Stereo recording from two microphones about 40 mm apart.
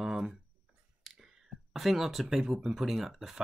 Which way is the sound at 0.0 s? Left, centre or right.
Centre.